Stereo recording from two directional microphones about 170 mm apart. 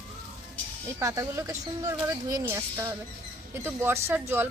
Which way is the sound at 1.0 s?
15° right (ahead or behind).